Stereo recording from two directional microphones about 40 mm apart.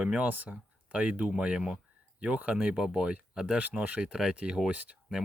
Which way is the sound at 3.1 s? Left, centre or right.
Right.